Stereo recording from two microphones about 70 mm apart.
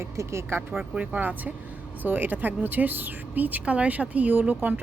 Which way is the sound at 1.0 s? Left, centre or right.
Right.